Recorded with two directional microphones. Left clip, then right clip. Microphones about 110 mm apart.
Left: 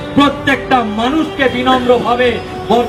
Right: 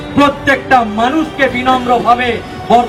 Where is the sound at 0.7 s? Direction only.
50° right (ahead or behind).